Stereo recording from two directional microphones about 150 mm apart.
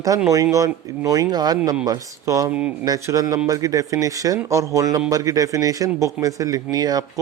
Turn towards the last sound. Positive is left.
turn(degrees=-25)  # may be behind; listen again after turning